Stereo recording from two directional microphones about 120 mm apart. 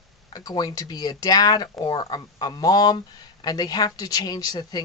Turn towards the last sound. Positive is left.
turn(degrees=35)  # may be behind; listen again after turning